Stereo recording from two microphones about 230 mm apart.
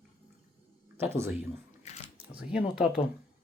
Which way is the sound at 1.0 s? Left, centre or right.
Centre.